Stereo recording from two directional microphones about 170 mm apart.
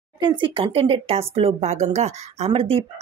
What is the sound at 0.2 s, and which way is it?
Speech, 30° right (ahead or behind).